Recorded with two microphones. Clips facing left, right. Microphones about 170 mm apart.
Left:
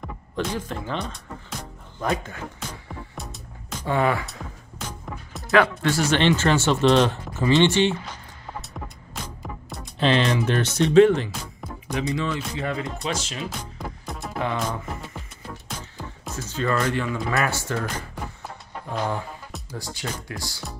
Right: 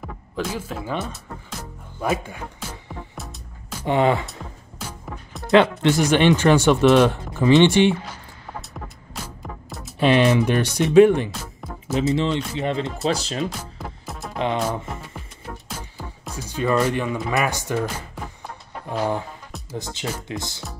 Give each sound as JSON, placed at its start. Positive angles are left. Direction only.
{"t": 0.4, "sound": "speech", "side_deg": -5}
{"t": 3.8, "sound": "speech", "side_deg": -20}
{"t": 4.3, "sound": "music", "side_deg": 0}
{"t": 5.5, "sound": "speech", "side_deg": -20}
{"t": 8.5, "sound": "music", "side_deg": -5}
{"t": 9.9, "sound": "speech", "side_deg": -10}
{"t": 12.1, "sound": "speech", "side_deg": -25}
{"t": 13.6, "sound": "music", "side_deg": -5}
{"t": 16.4, "sound": "speech", "side_deg": -15}
{"t": 18.9, "sound": "music", "side_deg": -10}
{"t": 19.8, "sound": "speech", "side_deg": -20}